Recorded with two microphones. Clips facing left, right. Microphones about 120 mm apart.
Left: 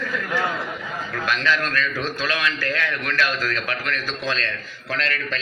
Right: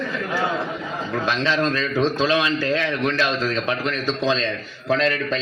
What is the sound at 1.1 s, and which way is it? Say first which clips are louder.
Speech: right 1 dB; 25° right (ahead or behind).